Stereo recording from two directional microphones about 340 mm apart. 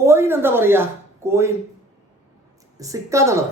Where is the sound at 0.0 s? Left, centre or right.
Centre.